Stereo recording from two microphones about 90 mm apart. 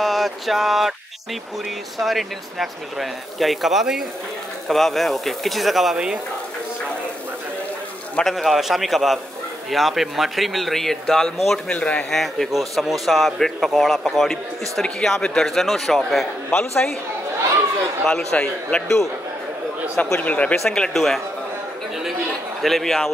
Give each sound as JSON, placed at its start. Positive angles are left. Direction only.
{"t": 0.0, "sound": "a sound", "side_deg": 0}
{"t": 2.0, "sound": "a man's voice", "side_deg": 0}
{"t": 8.2, "sound": "a man's voice", "side_deg": 0}
{"t": 12.2, "sound": "a man's voice", "side_deg": 0}
{"t": 16.4, "sound": "a man's voice", "side_deg": 25}
{"t": 18.0, "sound": "speech", "side_deg": 5}
{"t": 20.2, "sound": "a man's voice", "side_deg": 15}
{"t": 22.6, "sound": "a man's voice", "side_deg": 0}